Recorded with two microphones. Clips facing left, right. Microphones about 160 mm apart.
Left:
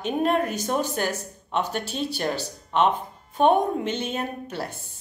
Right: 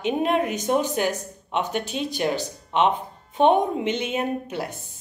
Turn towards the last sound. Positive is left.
turn(degrees=-15)  # may be behind; listen again after turning